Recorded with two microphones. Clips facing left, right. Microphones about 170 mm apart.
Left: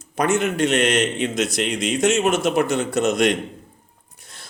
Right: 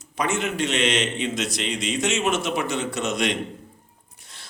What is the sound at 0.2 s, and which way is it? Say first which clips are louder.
A man's voice: left 5 dB; 50° left (ahead or behind).